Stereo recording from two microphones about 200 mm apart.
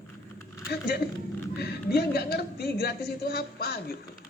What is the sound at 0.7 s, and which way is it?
A man's voice, 50° left (ahead or behind).